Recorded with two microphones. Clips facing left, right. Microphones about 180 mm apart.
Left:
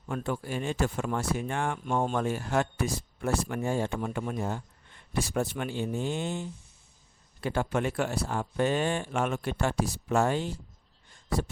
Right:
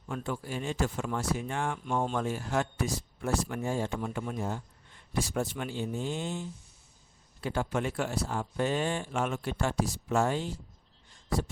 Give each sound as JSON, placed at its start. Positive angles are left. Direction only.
{"t": 0.1, "sound": "speech", "side_deg": 60}
{"t": 7.4, "sound": "speech", "side_deg": 60}